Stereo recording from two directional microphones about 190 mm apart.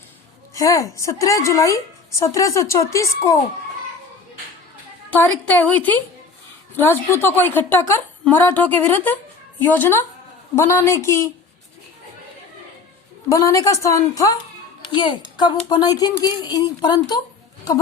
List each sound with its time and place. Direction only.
0.5 s a woman's voice: 15° left (ahead or behind)
5.1 s a woman's voice: 10° left (ahead or behind)
13.2 s a woman's voice: 15° left (ahead or behind)